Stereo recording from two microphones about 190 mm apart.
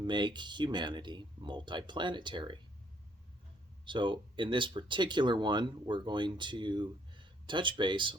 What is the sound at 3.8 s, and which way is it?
Speech, 25° right (ahead or behind).